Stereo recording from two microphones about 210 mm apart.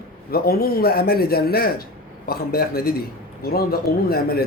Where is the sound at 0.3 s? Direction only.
50° left (ahead or behind).